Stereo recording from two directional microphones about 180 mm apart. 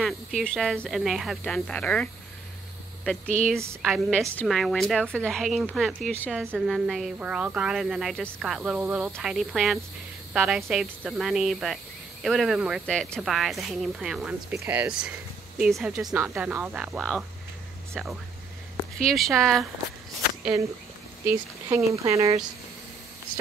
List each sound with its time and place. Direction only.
0.0 s speech: centre (ahead or behind)
3.8 s speech: centre (ahead or behind)
6.2 s speech: 10° right (ahead or behind)
6.5 s speech: centre (ahead or behind)
21.3 s speech: 15° right (ahead or behind)